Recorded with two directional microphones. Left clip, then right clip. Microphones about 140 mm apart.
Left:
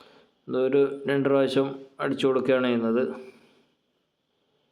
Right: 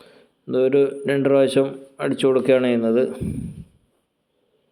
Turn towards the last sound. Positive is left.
turn(degrees=-20)  # may be behind; listen again after turning